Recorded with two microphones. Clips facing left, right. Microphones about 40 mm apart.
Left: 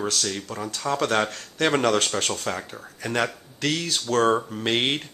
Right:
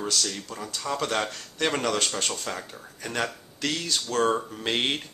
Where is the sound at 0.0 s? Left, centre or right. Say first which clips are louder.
Left 2 dB; centre.